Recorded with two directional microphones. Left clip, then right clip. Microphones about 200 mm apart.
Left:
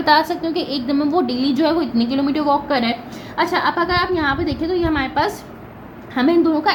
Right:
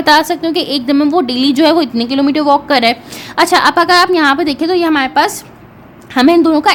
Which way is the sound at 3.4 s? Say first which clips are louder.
Right 9 dB; 50° right (ahead or behind).